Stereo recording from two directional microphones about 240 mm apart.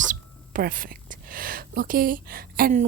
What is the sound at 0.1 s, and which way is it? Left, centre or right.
Speech, right.